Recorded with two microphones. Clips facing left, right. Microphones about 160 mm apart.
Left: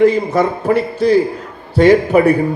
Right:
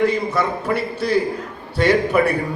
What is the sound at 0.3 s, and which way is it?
A man's voice, 35° left (ahead or behind).